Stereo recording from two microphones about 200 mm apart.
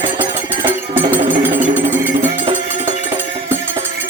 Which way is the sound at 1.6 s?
40° right (ahead or behind).